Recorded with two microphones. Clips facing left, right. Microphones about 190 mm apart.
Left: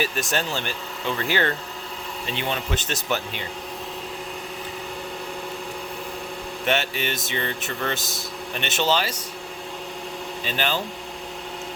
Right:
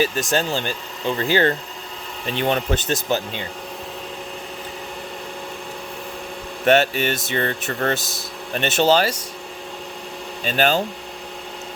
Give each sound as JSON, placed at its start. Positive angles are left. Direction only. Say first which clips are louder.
{"t": 0.3, "sound": "speech", "louder": "right 5 dB", "side_deg": -35}
{"t": 6.7, "sound": "speech", "louder": "right 8 dB", "side_deg": -45}
{"t": 8.5, "sound": "speech", "louder": "right 6 dB", "side_deg": -40}
{"t": 10.6, "sound": "speech", "louder": "right 8 dB", "side_deg": -45}